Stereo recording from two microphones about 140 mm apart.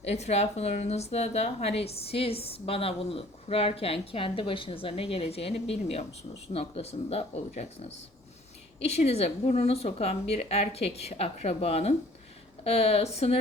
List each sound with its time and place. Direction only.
0.0 s speech: 50° left (ahead or behind)